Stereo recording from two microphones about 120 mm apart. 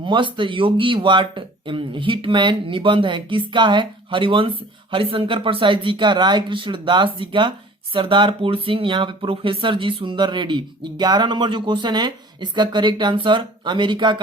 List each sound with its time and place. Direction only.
0.0 s speech: 45° right (ahead or behind)